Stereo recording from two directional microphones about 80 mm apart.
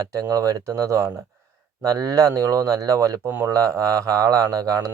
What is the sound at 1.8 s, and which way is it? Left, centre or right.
Speech, right.